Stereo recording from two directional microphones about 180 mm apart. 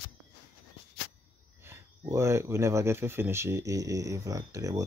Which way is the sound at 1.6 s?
15° right (ahead or behind).